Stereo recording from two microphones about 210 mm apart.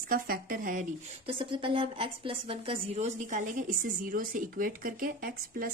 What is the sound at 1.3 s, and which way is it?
A woman's voice, 25° right (ahead or behind).